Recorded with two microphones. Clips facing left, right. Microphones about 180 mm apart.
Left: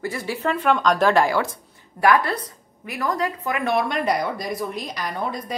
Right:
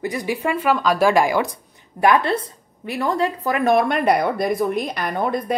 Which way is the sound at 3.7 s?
60° right (ahead or behind).